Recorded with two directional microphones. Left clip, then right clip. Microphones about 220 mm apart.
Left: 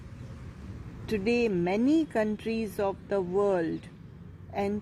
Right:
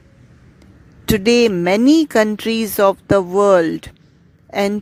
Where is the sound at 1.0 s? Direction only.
50° right (ahead or behind).